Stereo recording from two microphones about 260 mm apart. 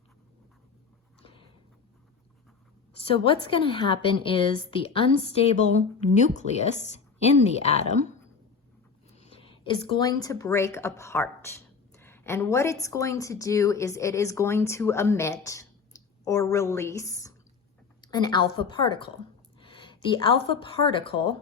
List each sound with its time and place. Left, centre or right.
1.2 s a sound: left
3.1 s a woman's voice: left
9.1 s a woman's voice: left